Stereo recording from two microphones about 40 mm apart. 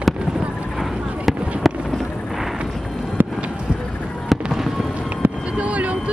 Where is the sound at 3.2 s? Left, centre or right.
Right.